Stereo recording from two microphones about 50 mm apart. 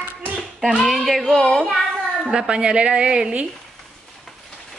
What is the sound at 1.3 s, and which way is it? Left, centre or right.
Speech, centre.